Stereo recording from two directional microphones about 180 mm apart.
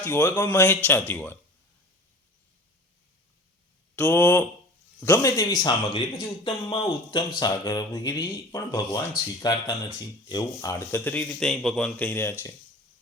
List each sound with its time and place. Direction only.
0.0 s speech: 10° left (ahead or behind)
3.9 s speech: 10° left (ahead or behind)